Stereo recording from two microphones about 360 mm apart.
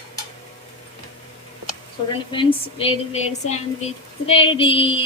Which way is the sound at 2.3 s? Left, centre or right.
Centre.